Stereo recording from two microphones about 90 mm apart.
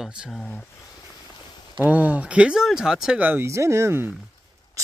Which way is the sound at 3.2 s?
20° right (ahead or behind).